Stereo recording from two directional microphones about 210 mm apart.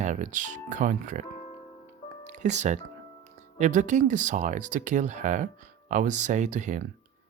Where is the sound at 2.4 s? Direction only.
35° right (ahead or behind).